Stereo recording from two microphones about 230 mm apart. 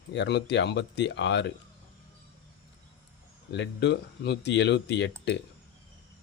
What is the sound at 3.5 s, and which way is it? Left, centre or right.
A man's voice, left.